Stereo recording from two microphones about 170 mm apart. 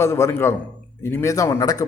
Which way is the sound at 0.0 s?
15° left (ahead or behind).